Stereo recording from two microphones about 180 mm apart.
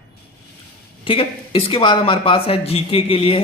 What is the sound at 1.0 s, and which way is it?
Speech, 30° left (ahead or behind).